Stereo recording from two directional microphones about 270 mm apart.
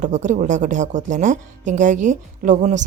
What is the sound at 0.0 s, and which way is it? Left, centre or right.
Speech, right.